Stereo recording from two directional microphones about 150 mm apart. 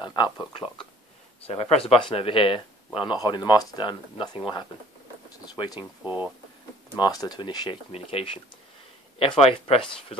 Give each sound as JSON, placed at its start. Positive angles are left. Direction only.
{"t": 0.0, "sound": "speech", "side_deg": 30}
{"t": 1.4, "sound": "speech", "side_deg": 40}
{"t": 5.4, "sound": "speech", "side_deg": 25}
{"t": 5.8, "sound": "speech", "side_deg": -10}
{"t": 7.0, "sound": "speech", "side_deg": 25}